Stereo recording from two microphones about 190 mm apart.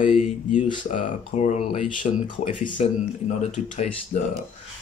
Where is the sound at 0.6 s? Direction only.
25° left (ahead or behind).